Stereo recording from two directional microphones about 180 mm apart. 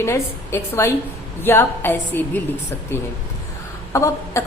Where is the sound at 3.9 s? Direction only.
15° left (ahead or behind).